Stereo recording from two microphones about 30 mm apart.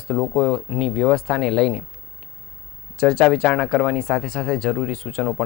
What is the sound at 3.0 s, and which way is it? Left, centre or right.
Speech, centre.